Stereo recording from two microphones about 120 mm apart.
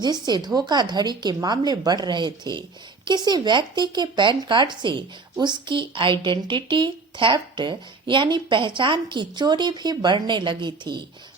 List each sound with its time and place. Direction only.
0.0 s speech: 35° right (ahead or behind)